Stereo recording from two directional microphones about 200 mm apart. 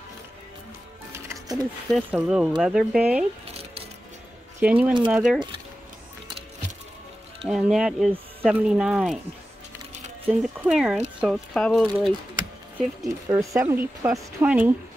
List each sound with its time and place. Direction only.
1.1 s music: 15° right (ahead or behind)
1.9 s speech: 5° right (ahead or behind)
4.6 s speech: 10° right (ahead or behind)
7.4 s speech: 5° right (ahead or behind)
10.2 s speech: 5° right (ahead or behind)
13.3 s speech: 15° right (ahead or behind)